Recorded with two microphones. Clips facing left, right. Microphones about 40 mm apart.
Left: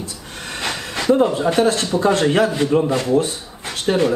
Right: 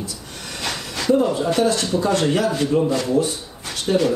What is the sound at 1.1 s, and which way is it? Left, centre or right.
Speech, left.